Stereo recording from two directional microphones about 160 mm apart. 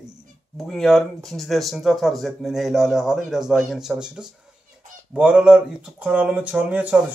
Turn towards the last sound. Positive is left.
turn(degrees=-10)  # may be behind; listen again after turning